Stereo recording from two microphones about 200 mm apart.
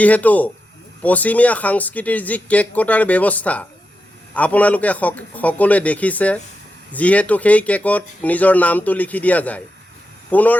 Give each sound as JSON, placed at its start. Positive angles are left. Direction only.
{"t": 0.0, "sound": "speech", "side_deg": 5}